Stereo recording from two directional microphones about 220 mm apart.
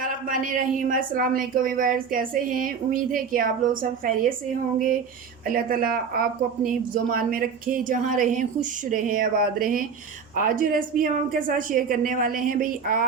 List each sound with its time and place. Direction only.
0.0 s a woman's voice: 40° right (ahead or behind)
5.5 s a woman's voice: 40° right (ahead or behind)